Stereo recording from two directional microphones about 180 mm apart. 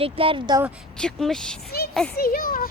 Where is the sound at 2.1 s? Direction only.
55° left (ahead or behind).